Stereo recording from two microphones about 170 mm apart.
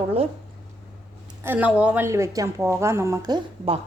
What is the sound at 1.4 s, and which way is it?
A woman's voice, 10° right (ahead or behind).